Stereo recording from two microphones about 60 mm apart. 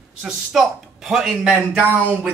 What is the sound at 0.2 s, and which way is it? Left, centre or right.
A man's voice, centre.